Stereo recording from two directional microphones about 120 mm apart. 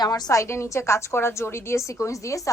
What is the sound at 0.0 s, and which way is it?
A woman's voice, 30° left (ahead or behind).